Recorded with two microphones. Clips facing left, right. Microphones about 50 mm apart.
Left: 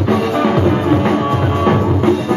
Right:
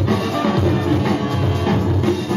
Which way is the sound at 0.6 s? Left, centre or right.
Left.